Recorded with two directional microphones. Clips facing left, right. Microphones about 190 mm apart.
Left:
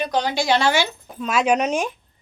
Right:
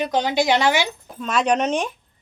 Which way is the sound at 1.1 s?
Centre (ahead or behind).